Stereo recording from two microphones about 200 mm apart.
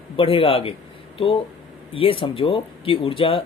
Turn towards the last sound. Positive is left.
turn(degrees=25)  # may be behind; listen again after turning